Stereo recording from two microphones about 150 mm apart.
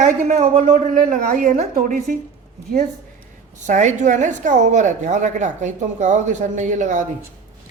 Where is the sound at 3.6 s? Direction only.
55° right (ahead or behind).